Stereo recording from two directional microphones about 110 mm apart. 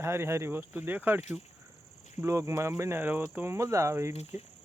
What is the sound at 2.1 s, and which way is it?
Speech, 25° right (ahead or behind).